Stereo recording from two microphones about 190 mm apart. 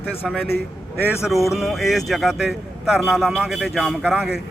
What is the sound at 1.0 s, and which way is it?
Speech, 5° right (ahead or behind).